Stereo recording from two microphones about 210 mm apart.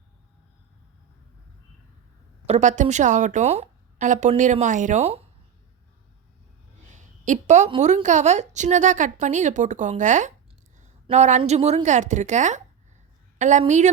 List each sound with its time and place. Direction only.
2.5 s a woman's voice: 35° right (ahead or behind)
6.8 s a woman's voice: 35° right (ahead or behind)